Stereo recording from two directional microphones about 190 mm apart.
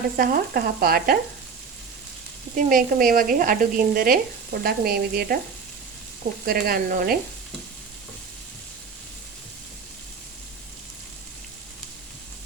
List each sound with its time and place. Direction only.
0.2 s sizzle: 50° right (ahead or behind)
2.6 s sizzle: 45° right (ahead or behind)
6.4 s sizzle: 50° right (ahead or behind)